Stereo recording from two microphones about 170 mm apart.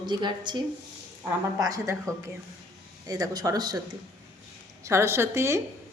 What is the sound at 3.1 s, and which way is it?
Speech, 20° right (ahead or behind).